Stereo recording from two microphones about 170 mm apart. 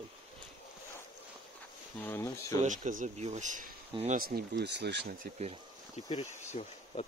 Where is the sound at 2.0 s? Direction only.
15° left (ahead or behind).